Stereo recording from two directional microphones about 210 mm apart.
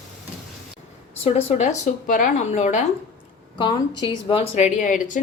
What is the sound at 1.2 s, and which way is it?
Speech, 30° left (ahead or behind).